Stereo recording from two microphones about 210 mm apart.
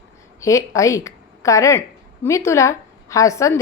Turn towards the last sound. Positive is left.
turn(degrees=15)  # may be behind; listen again after turning